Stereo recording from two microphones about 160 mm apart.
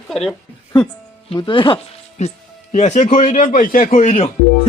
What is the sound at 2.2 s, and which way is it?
A man's voice, 45° left (ahead or behind).